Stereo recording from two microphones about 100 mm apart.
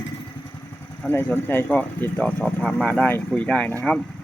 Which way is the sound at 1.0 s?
20° left (ahead or behind).